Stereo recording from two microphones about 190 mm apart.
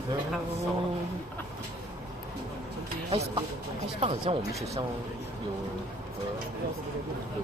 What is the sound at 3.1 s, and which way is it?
Speech, 35° right (ahead or behind).